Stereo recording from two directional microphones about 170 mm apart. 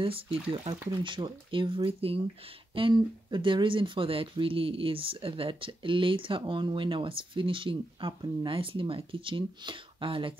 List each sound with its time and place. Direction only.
0.0 s speech: 30° right (ahead or behind)